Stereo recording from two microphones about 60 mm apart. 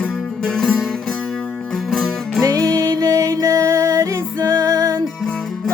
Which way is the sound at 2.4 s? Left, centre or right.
Right.